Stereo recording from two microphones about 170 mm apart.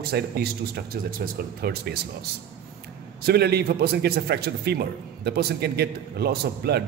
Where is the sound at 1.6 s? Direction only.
70° right (ahead or behind).